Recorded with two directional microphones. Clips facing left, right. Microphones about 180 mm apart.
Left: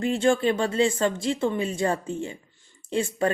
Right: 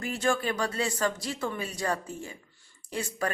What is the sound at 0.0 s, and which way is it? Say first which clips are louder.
Speech: left 7 dB; 25° left (ahead or behind).